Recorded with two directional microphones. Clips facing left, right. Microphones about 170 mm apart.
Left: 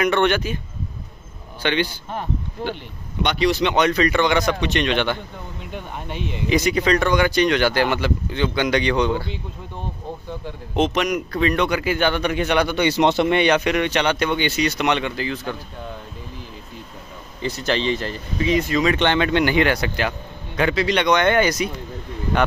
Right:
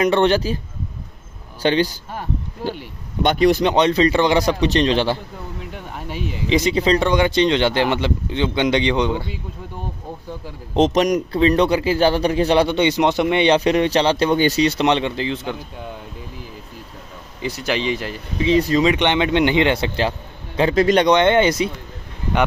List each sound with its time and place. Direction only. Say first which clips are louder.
0.0 s a man's voice: right 3 dB; 30° right (ahead or behind)
1.6 s a man's voice: right 4 dB; 40° right (ahead or behind)
3.2 s speech: right 4 dB; 45° right (ahead or behind)
3.7 s a man's voice: right 3 dB; 25° right (ahead or behind)
5.7 s speech: even; 5° right (ahead or behind)
6.5 s speech: right 2 dB; 25° right (ahead or behind)
10.7 s a man's voice: right 4 dB; 35° right (ahead or behind)
13.0 s speech: even; 15° right (ahead or behind)
13.4 s a man's voice: right 3 dB; 30° right (ahead or behind)
17.4 s speech: even; 10° right (ahead or behind)
18.4 s speech: right 4 dB; 30° right (ahead or behind)
18.9 s speech: right 1 dB; 20° right (ahead or behind)
20.7 s speech: right 6 dB; 45° right (ahead or behind)
21.1 s speech: right 3 dB; 25° right (ahead or behind)